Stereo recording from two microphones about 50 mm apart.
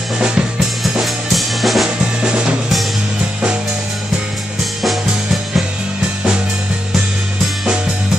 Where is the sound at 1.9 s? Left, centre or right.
Centre.